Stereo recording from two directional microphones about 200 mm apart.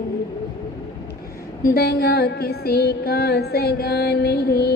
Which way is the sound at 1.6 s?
55° left (ahead or behind).